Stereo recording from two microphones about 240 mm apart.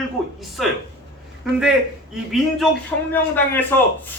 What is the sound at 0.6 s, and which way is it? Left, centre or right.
Speech, centre.